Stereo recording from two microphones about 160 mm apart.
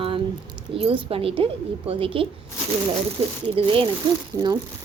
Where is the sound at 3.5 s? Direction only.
35° right (ahead or behind).